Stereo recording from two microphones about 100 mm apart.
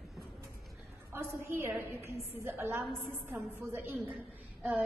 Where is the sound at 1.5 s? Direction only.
25° right (ahead or behind).